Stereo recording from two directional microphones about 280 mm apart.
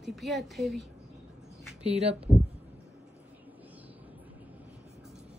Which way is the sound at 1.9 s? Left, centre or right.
Right.